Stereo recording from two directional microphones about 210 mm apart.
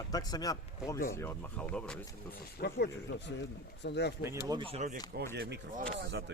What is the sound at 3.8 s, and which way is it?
Speech, 55° left (ahead or behind).